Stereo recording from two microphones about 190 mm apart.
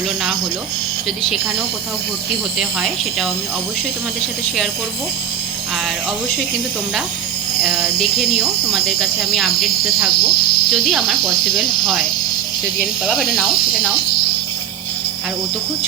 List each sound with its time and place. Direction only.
2.6 s speech: centre (ahead or behind)
9.3 s speech: centre (ahead or behind)
9.6 s speech: 50° left (ahead or behind)
10.7 s speech: centre (ahead or behind)
12.8 s speech: centre (ahead or behind)